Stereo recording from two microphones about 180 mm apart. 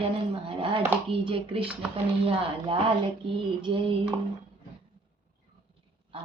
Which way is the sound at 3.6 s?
30° right (ahead or behind).